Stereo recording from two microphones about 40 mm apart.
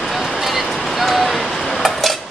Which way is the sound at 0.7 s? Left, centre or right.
Centre.